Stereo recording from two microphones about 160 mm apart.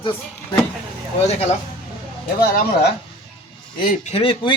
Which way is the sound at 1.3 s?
40° left (ahead or behind).